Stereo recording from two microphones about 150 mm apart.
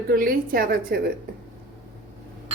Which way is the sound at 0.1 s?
75° right (ahead or behind).